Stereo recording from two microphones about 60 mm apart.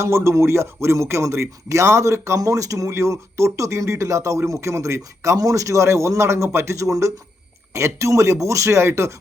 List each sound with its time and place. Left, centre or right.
0.0 s a man's voice: right